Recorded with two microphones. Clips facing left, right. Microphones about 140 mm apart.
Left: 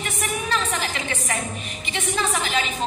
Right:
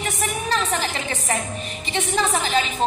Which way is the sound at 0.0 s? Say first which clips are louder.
Right 2 dB; 35° right (ahead or behind).